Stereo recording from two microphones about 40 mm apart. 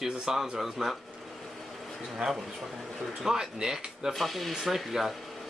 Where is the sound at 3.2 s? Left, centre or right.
Centre.